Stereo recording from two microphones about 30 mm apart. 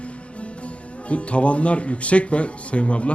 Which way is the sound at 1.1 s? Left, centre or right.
Left.